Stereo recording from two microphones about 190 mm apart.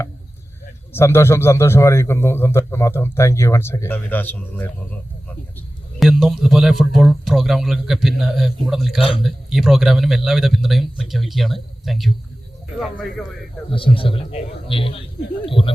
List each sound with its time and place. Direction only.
0.9 s a man's voice: 15° left (ahead or behind)
6.0 s speech: centre (ahead or behind)
9.0 s a man's voice: 30° left (ahead or behind)
9.2 s speech: centre (ahead or behind)
13.7 s a man's voice: 30° left (ahead or behind)